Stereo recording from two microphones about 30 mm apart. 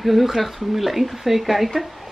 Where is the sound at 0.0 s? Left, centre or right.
Centre.